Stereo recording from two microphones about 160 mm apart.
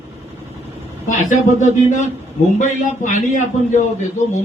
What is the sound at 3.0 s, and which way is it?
Speech, 50° left (ahead or behind).